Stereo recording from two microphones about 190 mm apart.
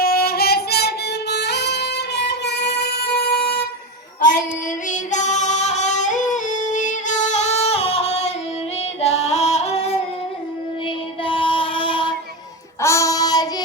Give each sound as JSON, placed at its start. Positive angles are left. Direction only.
{"t": 0.0, "sound": "music", "side_deg": 55}
{"t": 4.9, "sound": "music", "side_deg": 40}
{"t": 9.0, "sound": "female singing", "side_deg": 35}
{"t": 11.3, "sound": "music", "side_deg": 25}
{"t": 12.8, "sound": "child singing", "side_deg": 15}